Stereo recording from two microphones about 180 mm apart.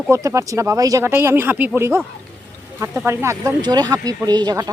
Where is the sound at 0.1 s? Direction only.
15° right (ahead or behind).